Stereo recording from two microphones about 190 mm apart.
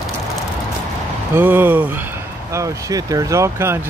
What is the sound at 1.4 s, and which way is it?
Speech, 10° right (ahead or behind).